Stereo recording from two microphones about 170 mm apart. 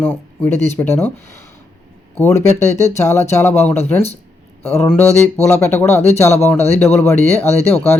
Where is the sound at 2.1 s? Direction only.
10° left (ahead or behind).